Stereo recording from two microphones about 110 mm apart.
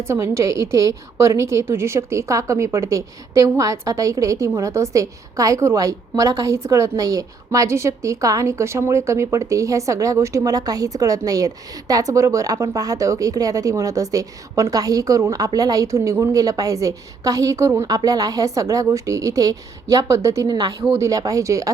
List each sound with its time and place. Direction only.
0.0 s a woman's voice: 25° right (ahead or behind)